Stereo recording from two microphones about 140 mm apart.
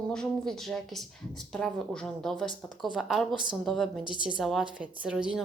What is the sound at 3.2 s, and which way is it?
Speech, 35° right (ahead or behind).